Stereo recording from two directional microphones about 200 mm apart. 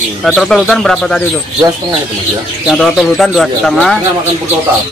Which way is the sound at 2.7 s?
Centre (ahead or behind).